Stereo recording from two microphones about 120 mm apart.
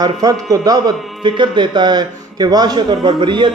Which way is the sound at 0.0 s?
30° right (ahead or behind).